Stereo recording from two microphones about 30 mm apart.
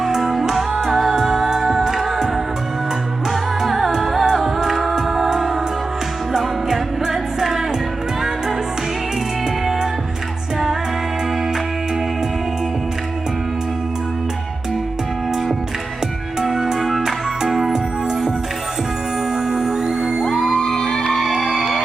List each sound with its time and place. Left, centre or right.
0.2 s music: centre
3.6 s music: centre
4.4 s a capella: centre
6.3 s music: centre
16.4 s music: centre
19.3 s music: centre
20.4 s music: left
20.7 s music: left
21.1 s music: centre